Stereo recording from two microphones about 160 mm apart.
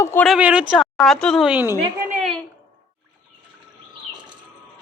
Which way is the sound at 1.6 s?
15° right (ahead or behind).